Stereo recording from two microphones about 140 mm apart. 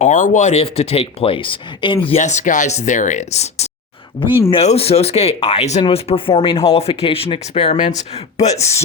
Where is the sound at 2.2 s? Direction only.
60° left (ahead or behind).